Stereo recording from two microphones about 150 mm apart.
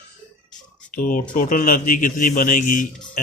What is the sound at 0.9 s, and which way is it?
A man's voice, 65° left (ahead or behind).